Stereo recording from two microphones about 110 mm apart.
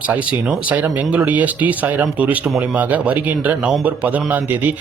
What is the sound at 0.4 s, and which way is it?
Speech, 15° right (ahead or behind).